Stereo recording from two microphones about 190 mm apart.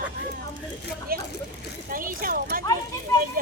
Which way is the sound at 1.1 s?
50° right (ahead or behind).